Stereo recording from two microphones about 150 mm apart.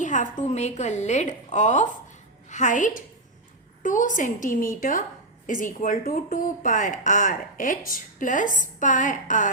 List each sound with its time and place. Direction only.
0.0 s a woman's voice: 55° left (ahead or behind)